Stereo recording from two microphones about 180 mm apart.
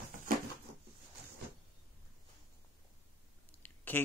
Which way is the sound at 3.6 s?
10° left (ahead or behind).